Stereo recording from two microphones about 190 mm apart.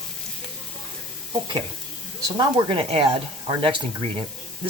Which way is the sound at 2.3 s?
25° right (ahead or behind).